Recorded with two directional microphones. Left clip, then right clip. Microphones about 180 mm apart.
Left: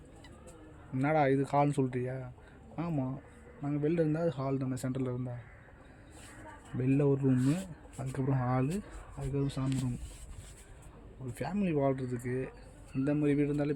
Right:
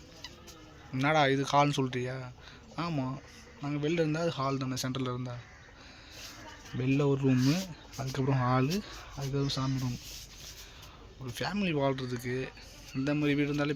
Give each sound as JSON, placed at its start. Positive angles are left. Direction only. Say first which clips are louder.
{"t": 0.9, "sound": "a man's voice", "louder": "right 2 dB", "side_deg": 10}
{"t": 6.7, "sound": "speech", "louder": "even", "side_deg": 5}
{"t": 7.5, "sound": "speech", "louder": "right 3 dB", "side_deg": -20}
{"t": 11.3, "sound": "a man's voice", "louder": "right 1 dB", "side_deg": 5}